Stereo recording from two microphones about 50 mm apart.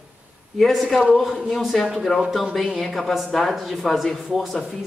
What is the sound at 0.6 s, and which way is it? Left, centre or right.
Speech, centre.